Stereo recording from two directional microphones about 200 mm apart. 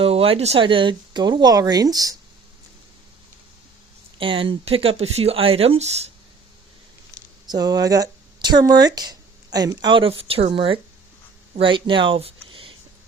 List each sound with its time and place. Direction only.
0.0 s speech: 30° right (ahead or behind)
4.2 s speech: 25° right (ahead or behind)
7.4 s speech: 20° right (ahead or behind)